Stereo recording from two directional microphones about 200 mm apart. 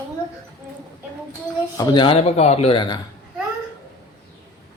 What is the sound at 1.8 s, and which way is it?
Speech, 20° left (ahead or behind).